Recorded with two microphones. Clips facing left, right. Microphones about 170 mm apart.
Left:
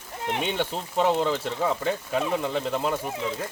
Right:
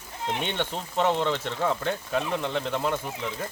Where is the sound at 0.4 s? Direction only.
5° left (ahead or behind).